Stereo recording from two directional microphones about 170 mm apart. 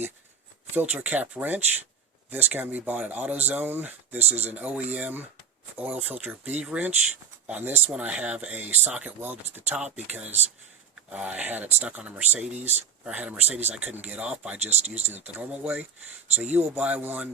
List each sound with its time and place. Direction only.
0.8 s speech: 10° right (ahead or behind)
14.6 s speech: 40° right (ahead or behind)
15.4 s speech: 10° right (ahead or behind)